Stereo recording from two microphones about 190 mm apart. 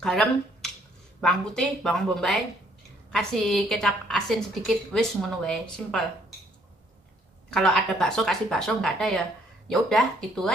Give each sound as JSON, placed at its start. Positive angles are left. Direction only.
{"t": 0.0, "sound": "a woman's voice", "side_deg": 5}
{"t": 7.5, "sound": "a woman's voice", "side_deg": 0}